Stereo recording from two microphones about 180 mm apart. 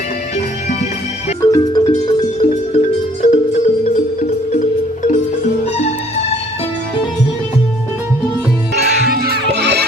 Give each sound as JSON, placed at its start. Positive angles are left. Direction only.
{"t": 1.4, "sound": "music", "side_deg": 20}
{"t": 2.5, "sound": "music", "side_deg": 40}
{"t": 5.7, "sound": "music", "side_deg": 35}
{"t": 9.0, "sound": "music", "side_deg": -60}